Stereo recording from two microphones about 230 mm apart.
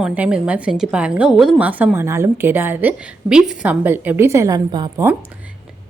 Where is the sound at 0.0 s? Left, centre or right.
Centre.